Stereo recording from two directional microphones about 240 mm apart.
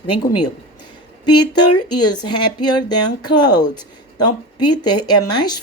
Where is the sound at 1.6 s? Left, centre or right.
Left.